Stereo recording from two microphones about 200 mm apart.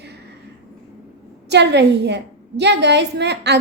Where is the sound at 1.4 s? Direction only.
60° right (ahead or behind).